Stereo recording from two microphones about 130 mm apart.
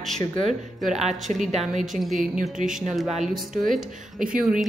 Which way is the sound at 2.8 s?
Centre (ahead or behind).